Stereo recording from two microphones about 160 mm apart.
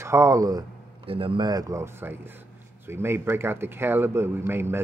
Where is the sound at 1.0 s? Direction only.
35° right (ahead or behind).